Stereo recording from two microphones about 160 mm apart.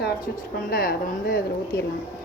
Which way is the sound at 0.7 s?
65° left (ahead or behind).